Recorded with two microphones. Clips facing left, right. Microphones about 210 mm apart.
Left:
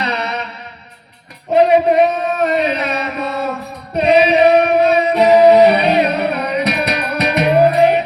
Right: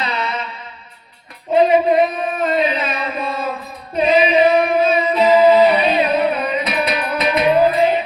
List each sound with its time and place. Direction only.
0.0 s music: 70° left (ahead or behind)
1.5 s a sound: 70° left (ahead or behind)
3.9 s singing: 70° left (ahead or behind)